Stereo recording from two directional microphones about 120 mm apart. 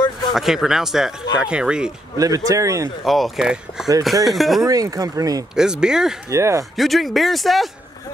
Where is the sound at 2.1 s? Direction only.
30° right (ahead or behind).